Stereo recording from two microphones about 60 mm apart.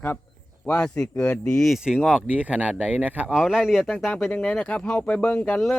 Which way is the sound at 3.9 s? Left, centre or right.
Centre.